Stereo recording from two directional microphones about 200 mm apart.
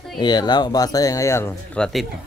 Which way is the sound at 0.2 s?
20° left (ahead or behind).